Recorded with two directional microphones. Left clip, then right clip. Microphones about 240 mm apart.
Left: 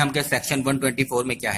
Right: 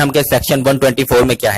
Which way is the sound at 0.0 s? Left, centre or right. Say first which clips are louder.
Right 9 dB; right.